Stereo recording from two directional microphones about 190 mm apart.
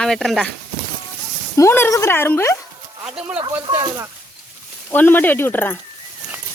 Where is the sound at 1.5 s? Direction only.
15° left (ahead or behind).